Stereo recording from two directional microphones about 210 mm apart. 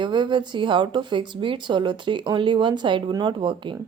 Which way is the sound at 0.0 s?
20° right (ahead or behind).